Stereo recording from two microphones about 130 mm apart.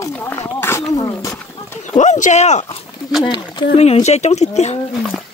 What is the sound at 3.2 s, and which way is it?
Speech, 35° left (ahead or behind).